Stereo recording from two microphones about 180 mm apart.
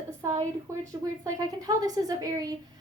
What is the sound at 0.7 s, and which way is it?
A woman's voice, 15° right (ahead or behind).